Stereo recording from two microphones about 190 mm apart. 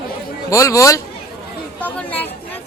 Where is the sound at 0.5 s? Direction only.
15° left (ahead or behind).